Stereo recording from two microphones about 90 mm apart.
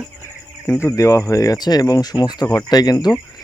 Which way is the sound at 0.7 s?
35° left (ahead or behind).